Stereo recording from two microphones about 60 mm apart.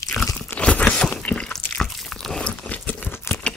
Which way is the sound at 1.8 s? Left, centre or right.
Centre.